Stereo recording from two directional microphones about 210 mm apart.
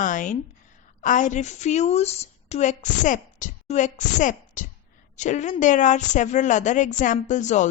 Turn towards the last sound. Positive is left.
turn(degrees=35)  # may be behind; listen again after turning